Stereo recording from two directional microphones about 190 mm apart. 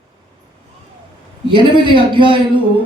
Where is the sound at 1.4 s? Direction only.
25° right (ahead or behind).